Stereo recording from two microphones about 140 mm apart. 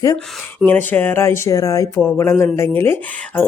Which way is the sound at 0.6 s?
15° left (ahead or behind).